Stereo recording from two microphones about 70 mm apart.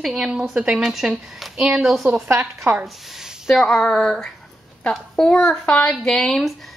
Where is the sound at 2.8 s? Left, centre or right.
Centre.